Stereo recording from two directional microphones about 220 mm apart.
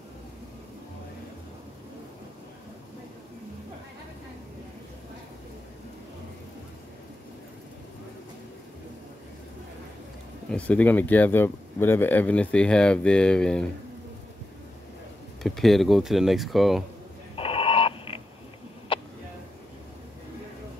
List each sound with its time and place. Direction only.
10.5 s speech: 5° left (ahead or behind)
15.4 s speech: centre (ahead or behind)
17.4 s a sound: 25° left (ahead or behind)